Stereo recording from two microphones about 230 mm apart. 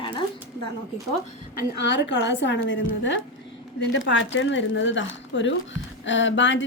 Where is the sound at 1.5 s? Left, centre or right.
Left.